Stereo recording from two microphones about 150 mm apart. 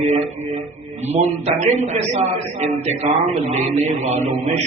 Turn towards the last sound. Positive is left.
turn(degrees=-45)  # may be behind; listen again after turning